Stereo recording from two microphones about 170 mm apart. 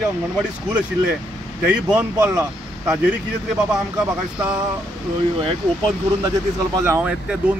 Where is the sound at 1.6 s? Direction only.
5° right (ahead or behind).